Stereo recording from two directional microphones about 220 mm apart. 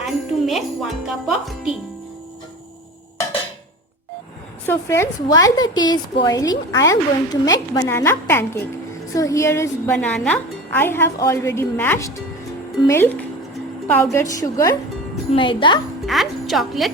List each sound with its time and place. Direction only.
0.0 s music: centre (ahead or behind)
4.6 s a woman's voice: 10° left (ahead or behind)
16.0 s a woman's voice: centre (ahead or behind)